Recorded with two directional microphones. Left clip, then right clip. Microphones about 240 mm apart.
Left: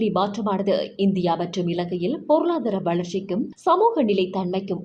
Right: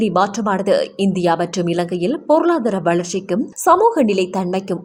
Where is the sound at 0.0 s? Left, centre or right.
Right.